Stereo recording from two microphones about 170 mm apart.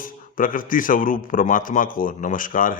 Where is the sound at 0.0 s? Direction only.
55° left (ahead or behind).